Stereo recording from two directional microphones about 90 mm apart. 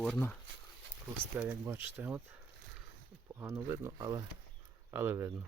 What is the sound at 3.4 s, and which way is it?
Speech, 30° right (ahead or behind).